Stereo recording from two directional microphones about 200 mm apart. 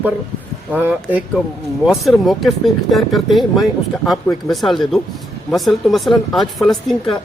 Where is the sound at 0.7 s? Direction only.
10° right (ahead or behind).